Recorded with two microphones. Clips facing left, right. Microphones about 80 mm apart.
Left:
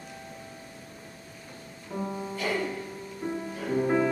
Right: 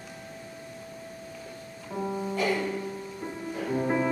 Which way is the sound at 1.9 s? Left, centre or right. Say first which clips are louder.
Right 1 dB; right.